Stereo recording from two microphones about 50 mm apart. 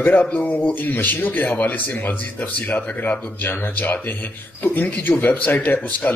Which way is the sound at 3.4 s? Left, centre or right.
Left.